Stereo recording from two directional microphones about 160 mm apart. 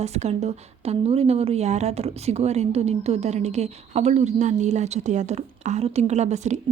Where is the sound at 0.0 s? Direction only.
45° right (ahead or behind).